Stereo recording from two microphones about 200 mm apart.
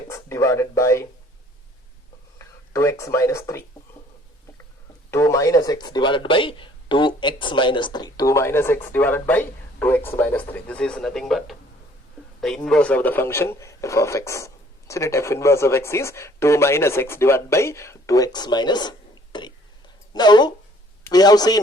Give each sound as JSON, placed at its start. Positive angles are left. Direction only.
{"t": 0.1, "sound": "speech", "side_deg": 15}
{"t": 2.4, "sound": "speech", "side_deg": 15}
{"t": 5.1, "sound": "a man's voice", "side_deg": 15}